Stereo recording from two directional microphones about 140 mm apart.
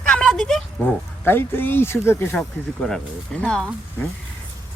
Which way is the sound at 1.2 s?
15° left (ahead or behind).